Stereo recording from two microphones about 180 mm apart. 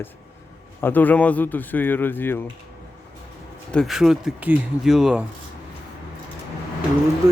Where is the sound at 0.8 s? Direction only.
10° left (ahead or behind).